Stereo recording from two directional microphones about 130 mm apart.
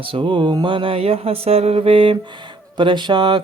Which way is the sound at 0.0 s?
40° right (ahead or behind).